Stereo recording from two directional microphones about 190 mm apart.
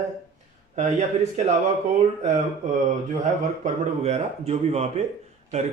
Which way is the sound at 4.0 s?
35° right (ahead or behind).